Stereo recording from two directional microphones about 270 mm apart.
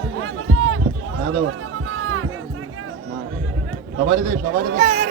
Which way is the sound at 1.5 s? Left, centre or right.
Right.